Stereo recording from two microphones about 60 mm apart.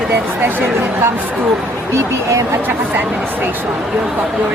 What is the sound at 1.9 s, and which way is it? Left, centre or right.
Speech, right.